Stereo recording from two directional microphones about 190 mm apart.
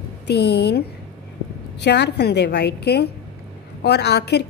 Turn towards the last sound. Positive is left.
turn(degrees=60)  # may be behind; listen again after turning